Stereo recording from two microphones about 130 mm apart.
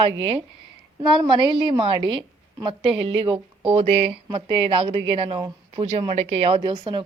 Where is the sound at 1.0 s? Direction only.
35° right (ahead or behind).